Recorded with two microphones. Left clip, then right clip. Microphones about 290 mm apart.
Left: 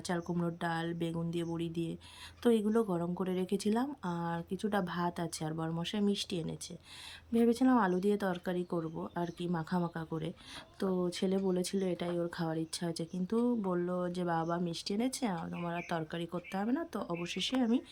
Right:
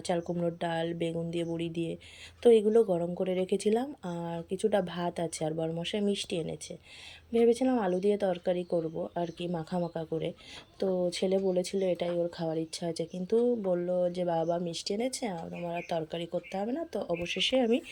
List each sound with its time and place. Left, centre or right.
0.1 s speech: centre